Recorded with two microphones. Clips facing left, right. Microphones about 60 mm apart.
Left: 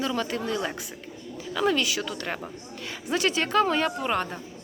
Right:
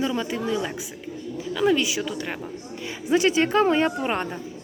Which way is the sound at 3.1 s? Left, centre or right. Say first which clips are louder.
Right 5 dB; centre.